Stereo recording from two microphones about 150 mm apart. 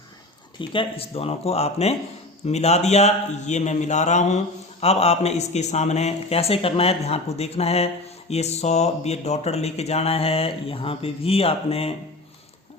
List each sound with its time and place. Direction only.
0.6 s speech: 35° left (ahead or behind)